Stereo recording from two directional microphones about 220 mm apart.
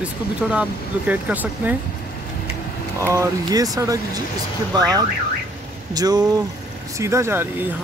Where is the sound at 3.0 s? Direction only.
15° right (ahead or behind).